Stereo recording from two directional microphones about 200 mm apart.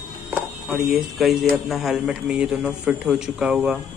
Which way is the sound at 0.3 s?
Centre (ahead or behind).